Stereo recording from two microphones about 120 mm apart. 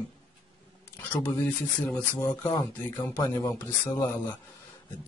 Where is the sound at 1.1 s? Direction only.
10° left (ahead or behind).